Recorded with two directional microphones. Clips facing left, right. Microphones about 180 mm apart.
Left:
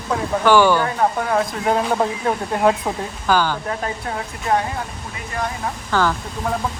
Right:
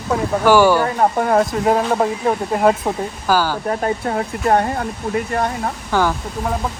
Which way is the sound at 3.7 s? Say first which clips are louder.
Right 6 dB; 40° right (ahead or behind).